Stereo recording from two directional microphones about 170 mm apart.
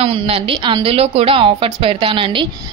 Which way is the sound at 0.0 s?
35° right (ahead or behind).